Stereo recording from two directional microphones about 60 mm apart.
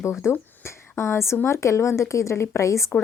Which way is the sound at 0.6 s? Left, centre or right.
Left.